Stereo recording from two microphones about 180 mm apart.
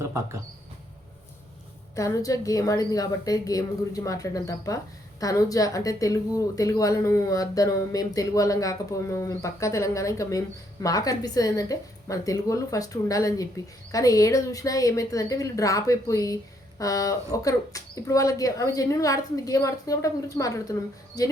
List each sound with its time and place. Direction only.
0.0 s speech: 15° right (ahead or behind)
2.0 s a woman's voice: 20° left (ahead or behind)